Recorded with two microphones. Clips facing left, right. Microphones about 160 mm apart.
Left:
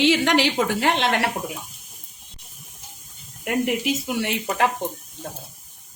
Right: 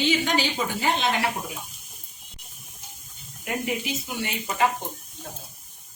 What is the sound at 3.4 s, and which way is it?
A woman's voice, 70° left (ahead or behind).